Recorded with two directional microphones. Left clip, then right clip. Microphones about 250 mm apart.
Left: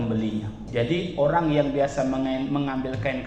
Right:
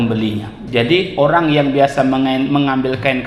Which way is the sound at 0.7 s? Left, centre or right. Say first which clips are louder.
Right 11 dB; right.